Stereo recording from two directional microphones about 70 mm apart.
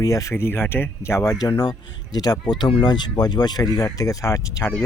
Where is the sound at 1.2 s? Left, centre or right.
Left.